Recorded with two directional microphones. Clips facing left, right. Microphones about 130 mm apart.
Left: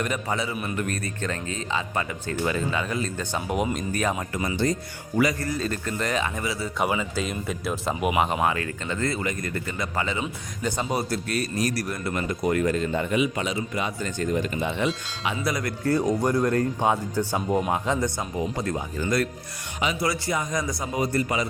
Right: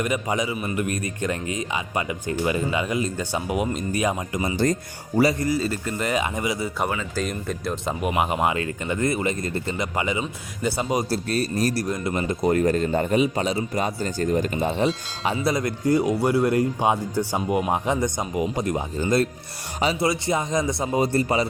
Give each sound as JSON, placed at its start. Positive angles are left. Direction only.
{"t": 0.0, "sound": "speech", "side_deg": -15}
{"t": 4.5, "sound": "speech", "side_deg": -45}
{"t": 5.1, "sound": "a man's voice", "side_deg": -30}
{"t": 5.4, "sound": "speech", "side_deg": -10}
{"t": 7.2, "sound": "speech", "side_deg": 0}
{"t": 8.4, "sound": "speech", "side_deg": -20}
{"t": 11.1, "sound": "a man's voice", "side_deg": -30}
{"t": 15.4, "sound": "speech", "side_deg": -25}